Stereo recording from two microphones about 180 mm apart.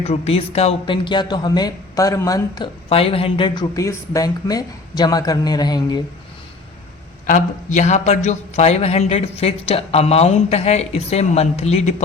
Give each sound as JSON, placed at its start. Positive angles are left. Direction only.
{"t": 0.0, "sound": "speech", "side_deg": 35}
{"t": 2.9, "sound": "speech", "side_deg": 30}
{"t": 7.3, "sound": "a man's voice", "side_deg": 45}